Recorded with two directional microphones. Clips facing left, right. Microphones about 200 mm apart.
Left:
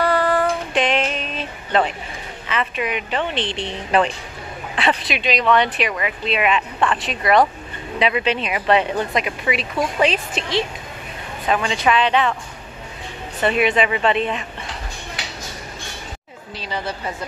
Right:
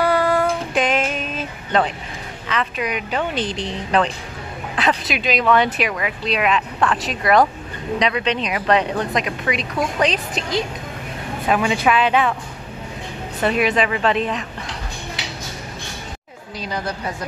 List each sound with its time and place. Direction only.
0.0 s child singing: centre (ahead or behind)
2.4 s a woman's voice: 5° left (ahead or behind)
3.3 s a woman's voice: 40° right (ahead or behind)
3.9 s a man's voice: 5° left (ahead or behind)
13.4 s a woman's voice: centre (ahead or behind)